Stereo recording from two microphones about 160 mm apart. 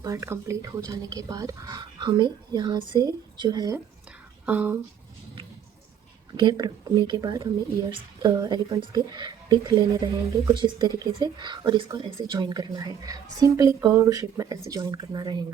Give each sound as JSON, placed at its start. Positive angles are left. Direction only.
{"t": 0.0, "sound": "speech", "side_deg": -20}
{"t": 4.4, "sound": "speech", "side_deg": -10}
{"t": 6.3, "sound": "speech", "side_deg": -25}